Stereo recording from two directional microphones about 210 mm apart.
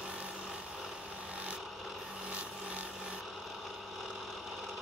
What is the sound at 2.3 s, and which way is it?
Filing, 5° right (ahead or behind).